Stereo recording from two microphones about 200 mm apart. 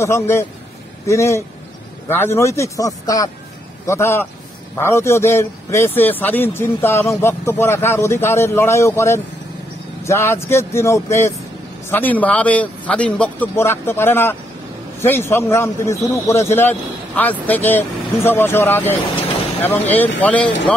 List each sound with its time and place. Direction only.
0.0 s a man's voice: 15° left (ahead or behind)